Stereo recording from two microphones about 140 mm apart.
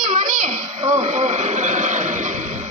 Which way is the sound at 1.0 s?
60° right (ahead or behind).